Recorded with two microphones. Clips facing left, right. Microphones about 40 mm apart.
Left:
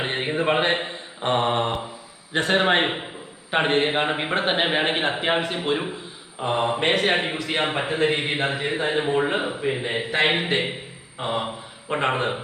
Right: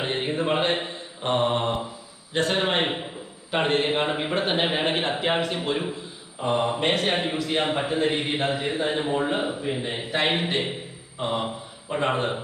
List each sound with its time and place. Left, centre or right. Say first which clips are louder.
0.0 s mantra: left 2 dB; left
2.3 s a man's voice: left 4 dB; centre
11.9 s a man's voice: left 2 dB; left
12.1 s a man's voice: left 1 dB; left